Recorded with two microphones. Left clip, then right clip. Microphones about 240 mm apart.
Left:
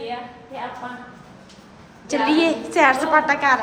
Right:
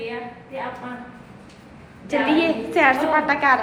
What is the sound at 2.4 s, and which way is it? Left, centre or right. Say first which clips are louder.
A woman's voice: left 3 dB; centre.